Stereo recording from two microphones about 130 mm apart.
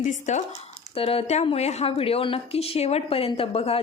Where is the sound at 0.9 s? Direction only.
45° left (ahead or behind).